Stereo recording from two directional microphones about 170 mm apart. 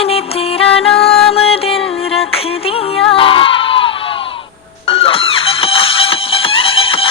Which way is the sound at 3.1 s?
30° left (ahead or behind).